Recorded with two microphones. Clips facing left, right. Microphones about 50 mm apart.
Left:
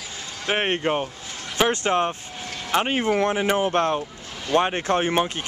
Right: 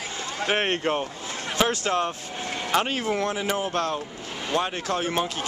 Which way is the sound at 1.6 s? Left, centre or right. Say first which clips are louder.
Left 3 dB; left.